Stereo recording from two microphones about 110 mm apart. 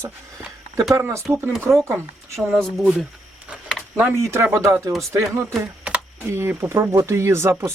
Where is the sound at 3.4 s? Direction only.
10° right (ahead or behind).